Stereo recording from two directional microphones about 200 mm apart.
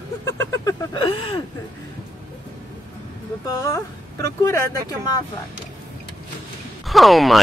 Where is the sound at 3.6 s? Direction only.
15° left (ahead or behind).